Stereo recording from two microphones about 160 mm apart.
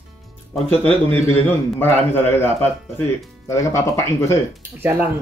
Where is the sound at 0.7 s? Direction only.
10° left (ahead or behind).